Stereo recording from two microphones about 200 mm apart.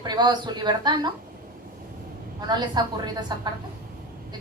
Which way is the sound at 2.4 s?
20° right (ahead or behind).